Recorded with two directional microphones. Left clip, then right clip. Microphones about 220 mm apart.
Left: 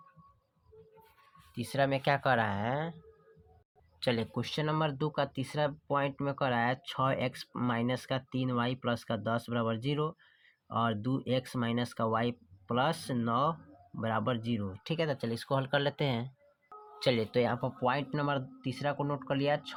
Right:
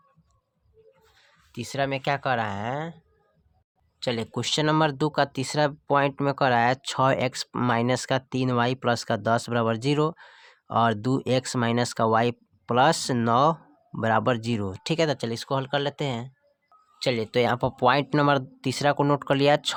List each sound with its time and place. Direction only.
1.5 s speech: 20° right (ahead or behind)
4.0 s speech: 20° right (ahead or behind)
4.4 s speech: 30° right (ahead or behind)
17.4 s speech: 35° right (ahead or behind)